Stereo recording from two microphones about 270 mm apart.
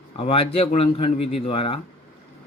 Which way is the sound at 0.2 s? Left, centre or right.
Left.